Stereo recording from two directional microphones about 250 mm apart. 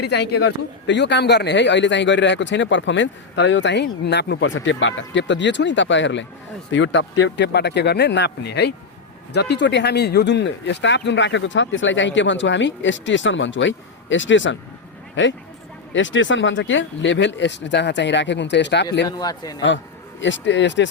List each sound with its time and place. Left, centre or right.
0.0 s a man's voice: left
19.0 s a man's voice: centre
20.2 s speech: left